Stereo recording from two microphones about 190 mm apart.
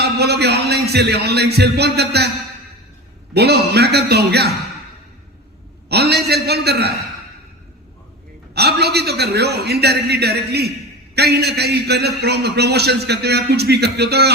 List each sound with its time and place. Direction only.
0.0 s speech: 60° right (ahead or behind)
3.3 s a man's voice: 60° right (ahead or behind)
5.9 s a man's voice: 60° right (ahead or behind)
8.5 s a man's voice: 60° right (ahead or behind)